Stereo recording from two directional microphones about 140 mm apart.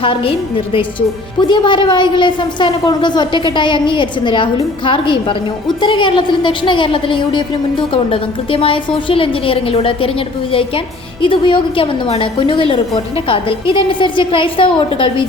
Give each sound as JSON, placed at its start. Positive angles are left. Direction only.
{"t": 0.0, "sound": "a woman's voice", "side_deg": 40}